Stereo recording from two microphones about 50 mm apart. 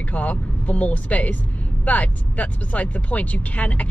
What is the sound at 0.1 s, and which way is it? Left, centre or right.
Speech, left.